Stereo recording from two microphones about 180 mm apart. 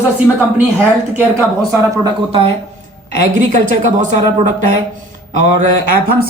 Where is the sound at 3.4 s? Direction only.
45° right (ahead or behind).